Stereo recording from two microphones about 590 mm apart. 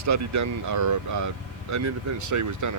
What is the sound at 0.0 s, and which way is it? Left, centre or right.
Speech, right.